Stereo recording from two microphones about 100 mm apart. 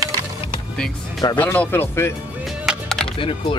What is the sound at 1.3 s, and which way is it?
Speech, 15° left (ahead or behind).